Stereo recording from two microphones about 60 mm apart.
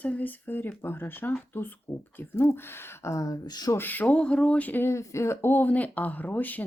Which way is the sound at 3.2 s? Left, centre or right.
Left.